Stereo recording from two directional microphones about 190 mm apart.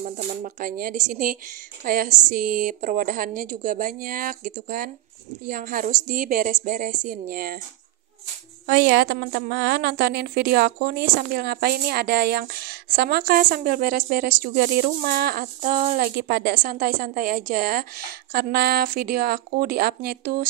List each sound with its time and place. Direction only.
0.4 s a woman's voice: 45° right (ahead or behind)
8.6 s a woman's voice: 55° right (ahead or behind)
16.2 s a woman's voice: 55° right (ahead or behind)